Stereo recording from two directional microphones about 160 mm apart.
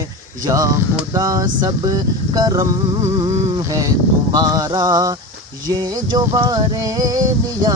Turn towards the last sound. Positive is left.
turn(degrees=-20)  # may be behind; listen again after turning